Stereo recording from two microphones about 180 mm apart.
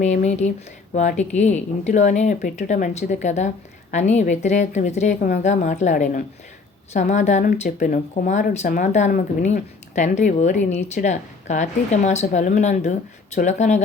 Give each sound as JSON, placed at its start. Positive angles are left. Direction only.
{"t": 0.0, "sound": "speech", "side_deg": 40}